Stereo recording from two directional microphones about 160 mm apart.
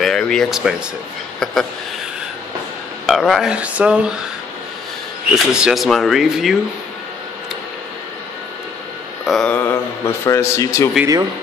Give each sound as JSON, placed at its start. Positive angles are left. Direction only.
{"t": 0.0, "sound": "speech", "side_deg": 5}
{"t": 3.1, "sound": "speech", "side_deg": 0}
{"t": 5.3, "sound": "speech", "side_deg": -5}
{"t": 9.2, "sound": "mantra", "side_deg": 0}
{"t": 9.5, "sound": "a man's voice", "side_deg": 15}